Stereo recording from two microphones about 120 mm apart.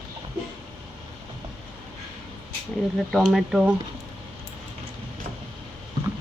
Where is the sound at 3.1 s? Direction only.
Centre (ahead or behind).